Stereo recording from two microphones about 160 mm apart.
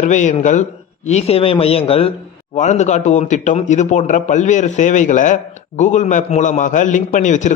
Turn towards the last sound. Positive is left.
turn(degrees=50)  # may be behind; listen again after turning